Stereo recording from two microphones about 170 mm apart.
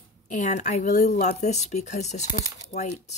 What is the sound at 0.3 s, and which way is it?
Speech, 45° left (ahead or behind).